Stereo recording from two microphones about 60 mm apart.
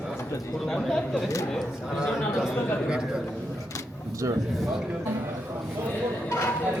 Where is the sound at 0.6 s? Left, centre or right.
Centre.